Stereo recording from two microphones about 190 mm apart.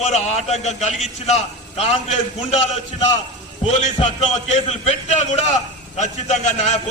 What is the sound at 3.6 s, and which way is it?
A man's voice, 30° left (ahead or behind).